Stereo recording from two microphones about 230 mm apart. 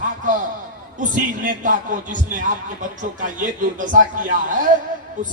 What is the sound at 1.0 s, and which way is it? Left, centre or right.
Speech, right.